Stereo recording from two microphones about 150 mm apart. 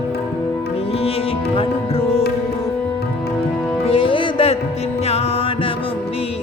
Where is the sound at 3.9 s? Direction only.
35° left (ahead or behind).